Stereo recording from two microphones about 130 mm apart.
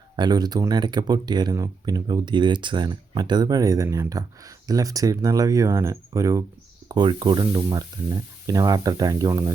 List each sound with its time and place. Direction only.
0.2 s speech: 30° right (ahead or behind)